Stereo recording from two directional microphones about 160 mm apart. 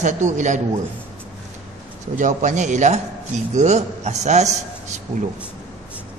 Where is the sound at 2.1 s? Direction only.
50° right (ahead or behind).